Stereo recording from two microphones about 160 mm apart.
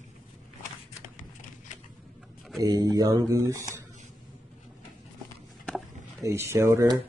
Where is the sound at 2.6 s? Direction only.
25° right (ahead or behind).